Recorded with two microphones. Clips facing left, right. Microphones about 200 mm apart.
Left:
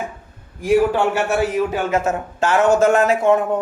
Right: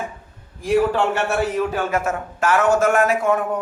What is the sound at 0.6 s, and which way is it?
A man's voice, 15° left (ahead or behind).